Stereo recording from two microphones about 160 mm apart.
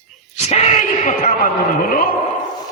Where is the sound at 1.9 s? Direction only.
65° left (ahead or behind).